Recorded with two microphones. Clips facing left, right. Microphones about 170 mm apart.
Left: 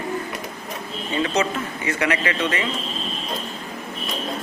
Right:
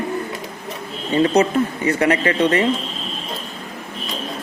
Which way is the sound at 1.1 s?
35° right (ahead or behind).